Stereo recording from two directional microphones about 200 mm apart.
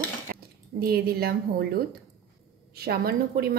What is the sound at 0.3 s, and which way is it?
Speech, 50° right (ahead or behind).